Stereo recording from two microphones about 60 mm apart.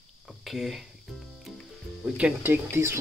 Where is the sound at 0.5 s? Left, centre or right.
Centre.